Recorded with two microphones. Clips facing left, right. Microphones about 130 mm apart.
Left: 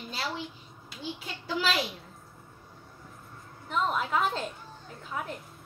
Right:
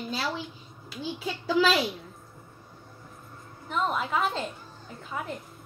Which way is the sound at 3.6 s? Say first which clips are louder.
Right 1 dB; centre (ahead or behind).